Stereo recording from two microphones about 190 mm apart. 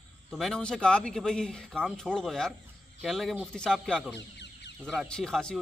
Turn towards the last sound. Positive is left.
turn(degrees=5)  # may be behind; listen again after turning